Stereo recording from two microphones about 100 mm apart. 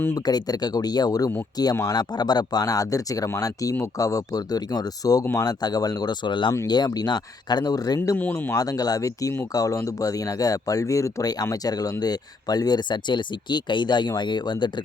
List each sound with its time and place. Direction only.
0.3 s speech: 40° left (ahead or behind)
1.7 s speech: 30° left (ahead or behind)
2.0 s speech: 45° left (ahead or behind)
5.2 s speech: 25° left (ahead or behind)
5.5 s speech: 40° left (ahead or behind)
8.1 s speech: 20° left (ahead or behind)
8.5 s speech: 40° left (ahead or behind)